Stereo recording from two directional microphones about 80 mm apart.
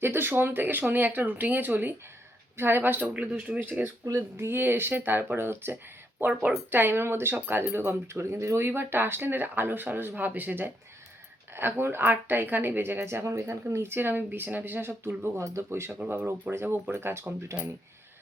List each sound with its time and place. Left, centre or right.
0.0 s speech: right
3.6 s speech: right